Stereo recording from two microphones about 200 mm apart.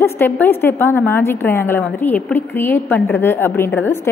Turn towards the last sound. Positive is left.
turn(degrees=10)  # may be behind; listen again after turning